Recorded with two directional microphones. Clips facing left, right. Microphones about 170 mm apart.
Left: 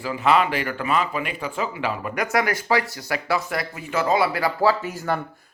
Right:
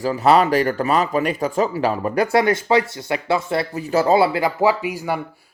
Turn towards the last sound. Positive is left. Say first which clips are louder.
# right 1 dB
turn(degrees=-10)  # may be behind; listen again after turning